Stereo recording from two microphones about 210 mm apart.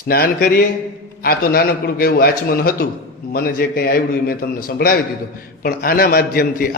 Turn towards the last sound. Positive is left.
turn(degrees=45)  # may be behind; listen again after turning